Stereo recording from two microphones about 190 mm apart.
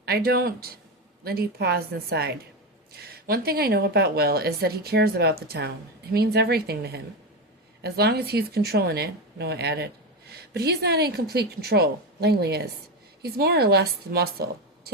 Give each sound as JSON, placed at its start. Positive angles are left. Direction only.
{"t": 0.0, "sound": "speech", "side_deg": -55}